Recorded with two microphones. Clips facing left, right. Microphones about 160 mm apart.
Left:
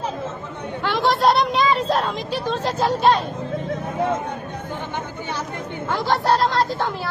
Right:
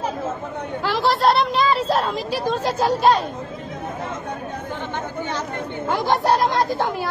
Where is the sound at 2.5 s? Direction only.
10° right (ahead or behind).